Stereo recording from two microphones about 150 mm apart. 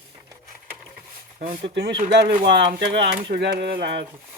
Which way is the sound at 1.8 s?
90° right.